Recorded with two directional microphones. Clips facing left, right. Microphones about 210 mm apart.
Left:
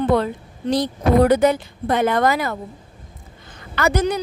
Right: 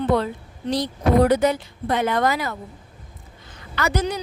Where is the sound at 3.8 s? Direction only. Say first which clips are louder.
Left 4 dB; 50° left (ahead or behind).